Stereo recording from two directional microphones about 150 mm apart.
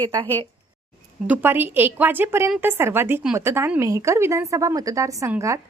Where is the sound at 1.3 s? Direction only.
15° right (ahead or behind).